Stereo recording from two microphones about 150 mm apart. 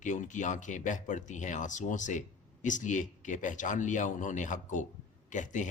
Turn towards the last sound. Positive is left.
turn(degrees=55)  # may be behind; listen again after turning